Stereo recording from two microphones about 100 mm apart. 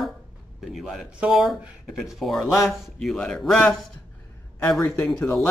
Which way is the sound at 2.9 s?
10° left (ahead or behind).